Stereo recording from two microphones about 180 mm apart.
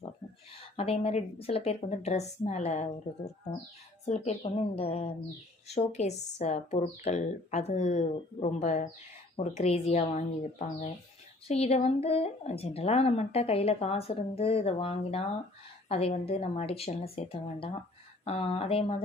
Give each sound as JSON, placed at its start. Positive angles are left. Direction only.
{"t": 0.8, "sound": "speech", "side_deg": 35}
{"t": 4.0, "sound": "speech", "side_deg": 35}